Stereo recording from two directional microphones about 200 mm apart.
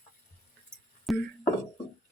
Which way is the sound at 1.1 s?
Centre (ahead or behind).